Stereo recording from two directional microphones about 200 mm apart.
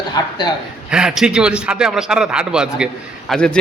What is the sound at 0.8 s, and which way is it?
A man's voice, 5° right (ahead or behind).